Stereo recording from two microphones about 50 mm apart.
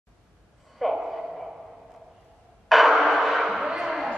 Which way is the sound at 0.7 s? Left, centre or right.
Centre.